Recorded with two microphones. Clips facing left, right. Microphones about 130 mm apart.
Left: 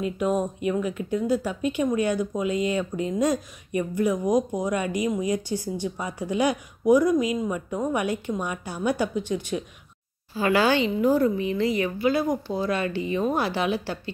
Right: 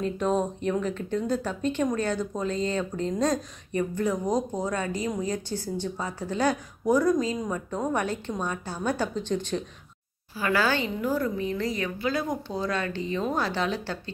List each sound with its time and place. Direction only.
0.0 s speech: 10° left (ahead or behind)
10.3 s speech: 20° left (ahead or behind)